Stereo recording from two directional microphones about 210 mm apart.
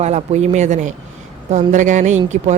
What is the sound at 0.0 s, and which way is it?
A woman's voice, 30° right (ahead or behind).